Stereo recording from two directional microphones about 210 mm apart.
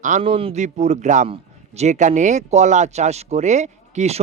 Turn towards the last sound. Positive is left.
turn(degrees=-35)  # may be behind; listen again after turning